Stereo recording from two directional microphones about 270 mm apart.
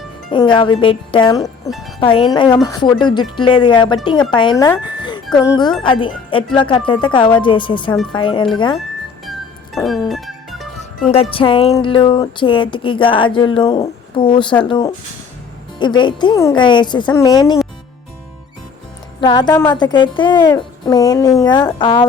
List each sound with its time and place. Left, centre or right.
0.3 s speech: centre
9.2 s music: centre
11.1 s speech: left
19.2 s speech: centre